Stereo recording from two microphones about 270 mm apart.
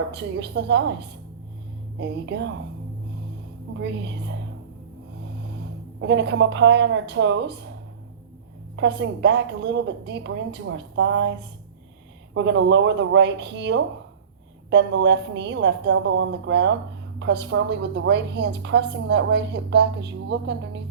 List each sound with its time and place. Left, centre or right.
0.1 s a woman's voice: right
2.0 s a woman's voice: right
3.8 s a woman's voice: right
6.0 s a woman's voice: right
8.7 s a woman's voice: right